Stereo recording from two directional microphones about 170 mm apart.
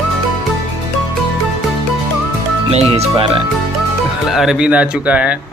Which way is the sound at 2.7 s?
35° right (ahead or behind).